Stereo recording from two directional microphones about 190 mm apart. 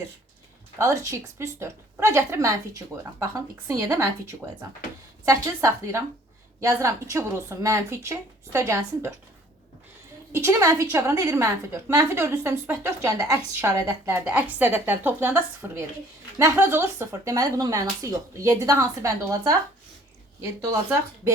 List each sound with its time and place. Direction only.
0.8 s a woman's voice: 15° right (ahead or behind)
10.3 s a woman's voice: 15° right (ahead or behind)